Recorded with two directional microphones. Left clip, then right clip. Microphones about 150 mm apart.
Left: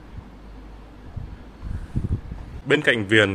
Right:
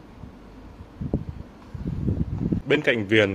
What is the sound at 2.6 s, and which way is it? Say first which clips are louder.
Speech: left 3 dB; centre (ahead or behind).